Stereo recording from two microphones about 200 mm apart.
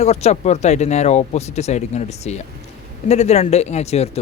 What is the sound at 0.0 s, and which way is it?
A man's voice, 30° left (ahead or behind).